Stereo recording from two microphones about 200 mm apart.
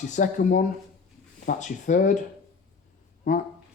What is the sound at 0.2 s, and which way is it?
Speech, 40° left (ahead or behind).